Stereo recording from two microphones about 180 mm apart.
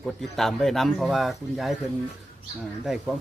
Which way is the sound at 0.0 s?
Centre (ahead or behind).